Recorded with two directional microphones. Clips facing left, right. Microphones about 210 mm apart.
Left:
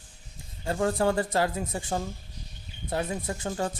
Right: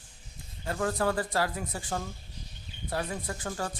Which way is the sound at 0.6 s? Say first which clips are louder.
Left 4 dB; 25° left (ahead or behind).